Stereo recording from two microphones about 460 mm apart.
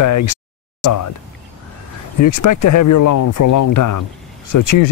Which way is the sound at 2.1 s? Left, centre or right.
Left.